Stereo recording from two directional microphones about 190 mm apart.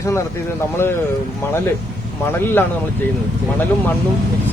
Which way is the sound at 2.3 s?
10° left (ahead or behind).